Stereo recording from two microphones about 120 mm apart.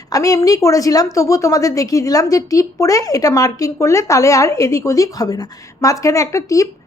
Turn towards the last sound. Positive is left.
turn(degrees=25)  # may be behind; listen again after turning